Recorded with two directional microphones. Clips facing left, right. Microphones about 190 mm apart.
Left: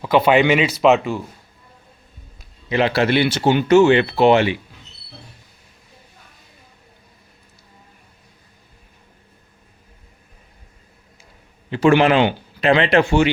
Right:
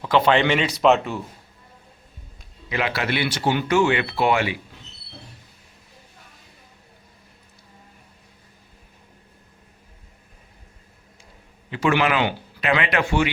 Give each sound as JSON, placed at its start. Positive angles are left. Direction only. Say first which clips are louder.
{"t": 0.0, "sound": "speech", "louder": "left 4 dB", "side_deg": 10}
{"t": 2.6, "sound": "speech", "louder": "left 7 dB", "side_deg": 30}
{"t": 11.7, "sound": "speech", "louder": "left 7 dB", "side_deg": 35}